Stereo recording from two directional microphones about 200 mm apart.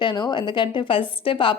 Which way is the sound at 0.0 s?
20° left (ahead or behind).